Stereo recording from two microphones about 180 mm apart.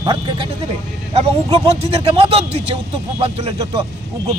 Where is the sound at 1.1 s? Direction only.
30° right (ahead or behind).